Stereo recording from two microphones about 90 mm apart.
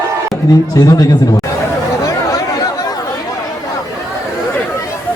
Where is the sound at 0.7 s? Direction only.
45° left (ahead or behind).